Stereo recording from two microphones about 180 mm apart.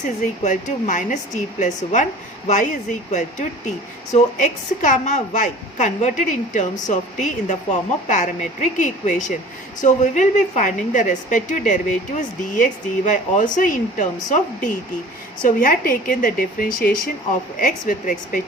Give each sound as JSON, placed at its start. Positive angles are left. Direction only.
{"t": 0.0, "sound": "a woman's voice", "side_deg": 45}